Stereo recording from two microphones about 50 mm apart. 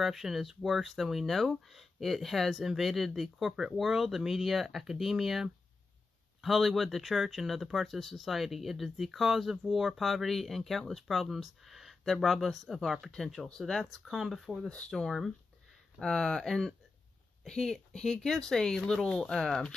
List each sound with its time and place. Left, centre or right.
0.0 s speech: centre
13.1 s speech: centre
14.1 s speech: centre
16.0 s speech: centre